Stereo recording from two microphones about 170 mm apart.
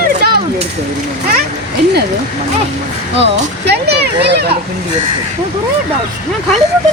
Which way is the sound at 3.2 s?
80° right.